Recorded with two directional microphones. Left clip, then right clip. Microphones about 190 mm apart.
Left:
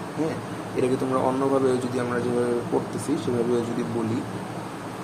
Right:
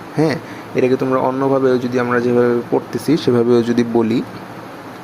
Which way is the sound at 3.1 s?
35° right (ahead or behind).